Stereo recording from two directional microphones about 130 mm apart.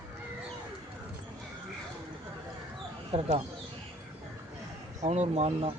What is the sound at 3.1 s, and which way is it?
Speech, 45° right (ahead or behind).